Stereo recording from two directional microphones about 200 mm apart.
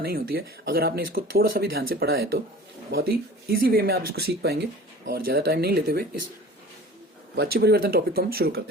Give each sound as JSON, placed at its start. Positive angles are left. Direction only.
{"t": 0.0, "sound": "speech", "side_deg": -50}
{"t": 7.3, "sound": "speech", "side_deg": -50}